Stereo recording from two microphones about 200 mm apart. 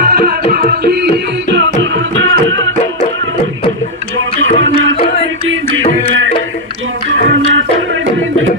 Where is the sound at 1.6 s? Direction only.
75° right (ahead or behind).